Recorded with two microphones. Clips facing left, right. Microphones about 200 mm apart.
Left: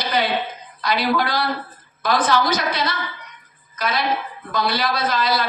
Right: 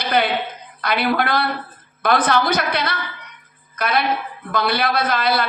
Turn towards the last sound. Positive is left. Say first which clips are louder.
# right 2 dB
turn(degrees=-60)  # may be behind; listen again after turning